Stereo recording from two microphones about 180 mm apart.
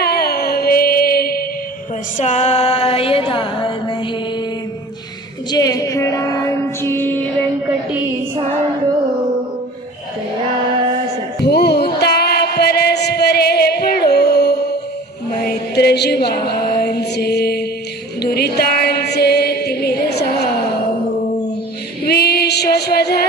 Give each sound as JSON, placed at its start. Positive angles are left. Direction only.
{"t": 0.0, "sound": "music", "side_deg": 60}
{"t": 2.1, "sound": "music", "side_deg": 40}
{"t": 5.5, "sound": "music", "side_deg": 20}
{"t": 11.4, "sound": "a sound", "side_deg": 65}
{"t": 15.4, "sound": "chant", "side_deg": 65}
{"t": 22.0, "sound": "female singing", "side_deg": 60}